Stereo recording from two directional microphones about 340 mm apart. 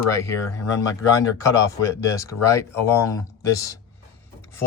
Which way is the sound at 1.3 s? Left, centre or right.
Centre.